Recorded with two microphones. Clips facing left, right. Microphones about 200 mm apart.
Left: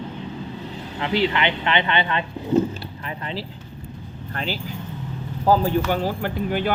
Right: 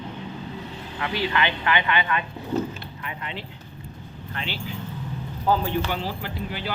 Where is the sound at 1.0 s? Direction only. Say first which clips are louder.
Left 4 dB; 25° left (ahead or behind).